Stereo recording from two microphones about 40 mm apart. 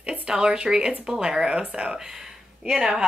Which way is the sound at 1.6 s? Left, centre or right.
Right.